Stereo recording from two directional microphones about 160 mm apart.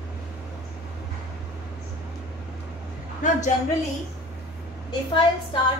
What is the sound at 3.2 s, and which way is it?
Speech, 50° left (ahead or behind).